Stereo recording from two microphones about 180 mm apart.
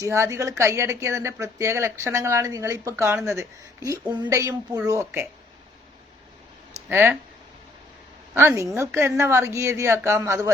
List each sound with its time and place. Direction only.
0.0 s speech: 15° right (ahead or behind)
6.8 s speech: 10° right (ahead or behind)
8.4 s speech: 15° right (ahead or behind)